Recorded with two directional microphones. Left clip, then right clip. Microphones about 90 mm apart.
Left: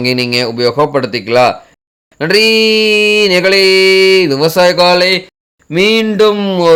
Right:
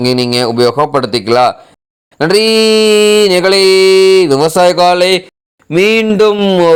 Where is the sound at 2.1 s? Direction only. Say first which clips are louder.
Even; 55° right (ahead or behind).